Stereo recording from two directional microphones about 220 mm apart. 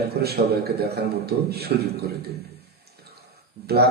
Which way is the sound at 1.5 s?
45° right (ahead or behind).